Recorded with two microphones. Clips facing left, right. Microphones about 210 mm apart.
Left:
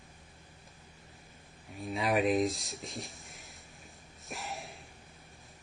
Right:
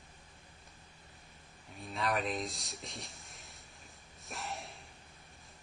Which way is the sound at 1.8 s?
Centre (ahead or behind).